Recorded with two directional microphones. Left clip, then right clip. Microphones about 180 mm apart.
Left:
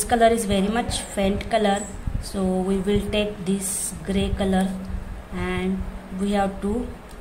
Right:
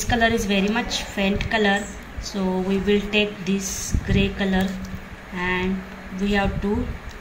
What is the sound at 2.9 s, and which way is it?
A woman's voice, 60° left (ahead or behind).